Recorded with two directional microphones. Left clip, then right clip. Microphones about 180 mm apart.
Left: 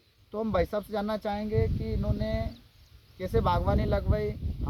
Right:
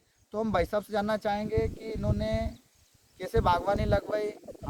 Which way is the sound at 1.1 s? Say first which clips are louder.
Right 2 dB; 10° right (ahead or behind).